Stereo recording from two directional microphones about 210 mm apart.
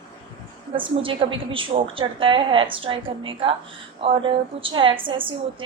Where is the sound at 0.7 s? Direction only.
25° right (ahead or behind).